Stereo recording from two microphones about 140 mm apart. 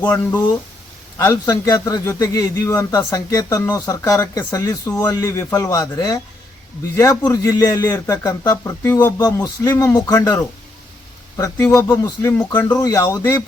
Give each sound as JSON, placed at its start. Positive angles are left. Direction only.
{"t": 1.2, "sound": "a man's voice", "side_deg": 25}
{"t": 12.5, "sound": "a man's voice", "side_deg": 15}